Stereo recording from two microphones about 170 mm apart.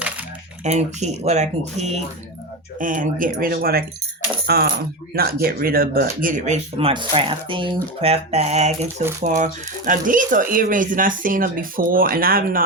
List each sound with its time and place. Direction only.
0.6 s speech: 40° right (ahead or behind)
2.7 s speech: 50° right (ahead or behind)